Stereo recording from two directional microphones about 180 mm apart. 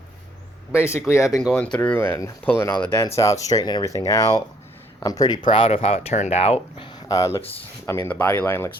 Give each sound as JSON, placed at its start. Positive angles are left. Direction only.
{"t": 1.1, "sound": "speech", "side_deg": 15}
{"t": 1.4, "sound": "speech", "side_deg": 5}